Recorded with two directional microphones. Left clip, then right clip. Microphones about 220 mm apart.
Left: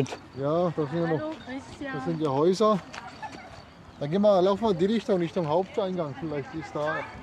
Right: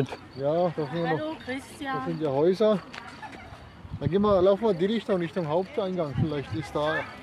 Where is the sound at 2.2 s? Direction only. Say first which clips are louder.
Even; 50° left (ahead or behind).